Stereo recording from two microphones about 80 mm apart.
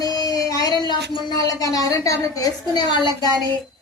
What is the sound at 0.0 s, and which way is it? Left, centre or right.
Speech, left.